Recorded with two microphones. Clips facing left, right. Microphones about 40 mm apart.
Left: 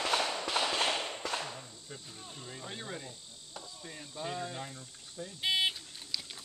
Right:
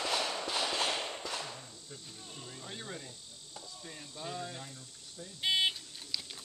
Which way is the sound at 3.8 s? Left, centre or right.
Centre.